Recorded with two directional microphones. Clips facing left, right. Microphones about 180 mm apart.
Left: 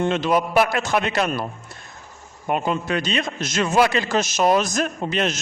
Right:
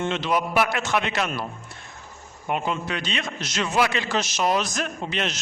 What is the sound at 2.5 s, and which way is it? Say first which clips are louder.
A man's voice: left 4 dB; 45° left (ahead or behind).